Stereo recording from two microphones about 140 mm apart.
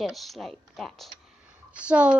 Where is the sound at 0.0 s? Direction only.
Centre (ahead or behind).